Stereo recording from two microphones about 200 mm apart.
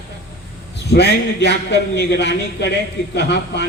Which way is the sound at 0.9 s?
60° left (ahead or behind).